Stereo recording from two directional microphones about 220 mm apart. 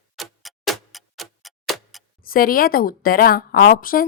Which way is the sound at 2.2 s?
40° left (ahead or behind).